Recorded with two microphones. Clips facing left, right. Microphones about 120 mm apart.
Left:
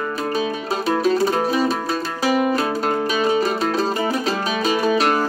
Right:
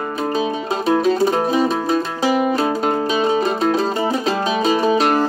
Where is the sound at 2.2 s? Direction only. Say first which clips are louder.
Left 1 dB; 25° right (ahead or behind).